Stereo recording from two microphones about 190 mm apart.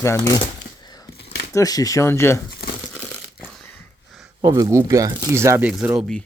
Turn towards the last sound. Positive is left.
turn(degrees=-5)  # may be behind; listen again after turning